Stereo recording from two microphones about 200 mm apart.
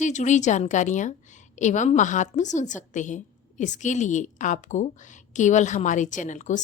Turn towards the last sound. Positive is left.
turn(degrees=40)  # may be behind; listen again after turning